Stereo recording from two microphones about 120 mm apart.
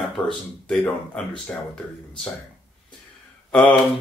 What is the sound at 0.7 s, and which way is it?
Speech, 5° left (ahead or behind).